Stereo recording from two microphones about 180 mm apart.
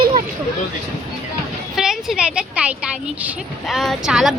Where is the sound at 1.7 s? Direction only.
Centre (ahead or behind).